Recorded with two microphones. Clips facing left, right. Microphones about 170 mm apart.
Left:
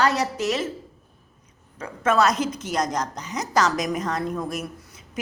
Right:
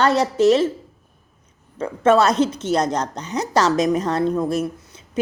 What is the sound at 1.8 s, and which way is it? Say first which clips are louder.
A woman's voice: right 5 dB; 30° right (ahead or behind).